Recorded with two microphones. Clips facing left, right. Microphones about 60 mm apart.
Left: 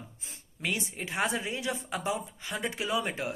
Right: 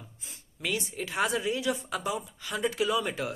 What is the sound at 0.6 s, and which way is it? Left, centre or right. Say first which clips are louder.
Speech: right 1 dB; left.